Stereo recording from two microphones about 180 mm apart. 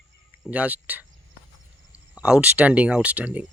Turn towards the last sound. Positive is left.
turn(degrees=-5)  # may be behind; listen again after turning